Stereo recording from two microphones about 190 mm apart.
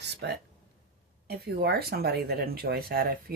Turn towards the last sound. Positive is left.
turn(degrees=-50)  # may be behind; listen again after turning